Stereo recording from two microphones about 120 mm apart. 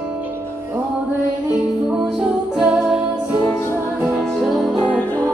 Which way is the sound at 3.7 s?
20° right (ahead or behind).